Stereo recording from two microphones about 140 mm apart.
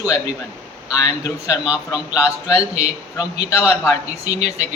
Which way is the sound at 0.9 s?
25° left (ahead or behind).